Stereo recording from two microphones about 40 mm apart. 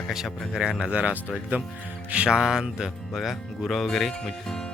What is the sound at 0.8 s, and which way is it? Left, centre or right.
Speech, right.